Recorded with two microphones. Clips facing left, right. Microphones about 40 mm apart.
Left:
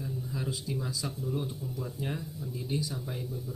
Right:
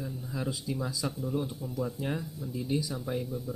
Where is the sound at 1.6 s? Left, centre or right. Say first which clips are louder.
Right 3 dB; right.